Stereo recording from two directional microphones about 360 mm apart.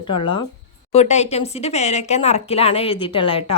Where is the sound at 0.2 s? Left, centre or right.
Centre.